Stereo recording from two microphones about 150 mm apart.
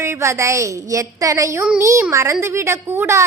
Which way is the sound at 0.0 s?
20° right (ahead or behind).